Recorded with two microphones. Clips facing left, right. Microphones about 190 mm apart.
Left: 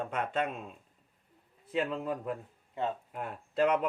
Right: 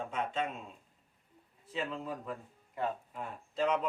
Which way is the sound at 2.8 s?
25° left (ahead or behind).